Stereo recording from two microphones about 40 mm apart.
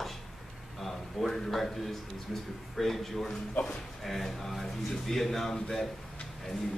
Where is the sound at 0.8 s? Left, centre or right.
Centre.